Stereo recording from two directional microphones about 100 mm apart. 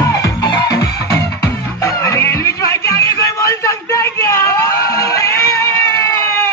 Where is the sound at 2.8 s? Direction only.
30° left (ahead or behind).